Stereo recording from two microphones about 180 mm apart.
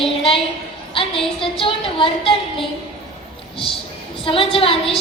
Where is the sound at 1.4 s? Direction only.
30° left (ahead or behind).